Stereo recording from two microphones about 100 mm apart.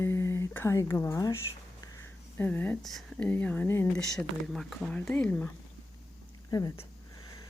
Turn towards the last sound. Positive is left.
turn(degrees=35)  # may be behind; listen again after turning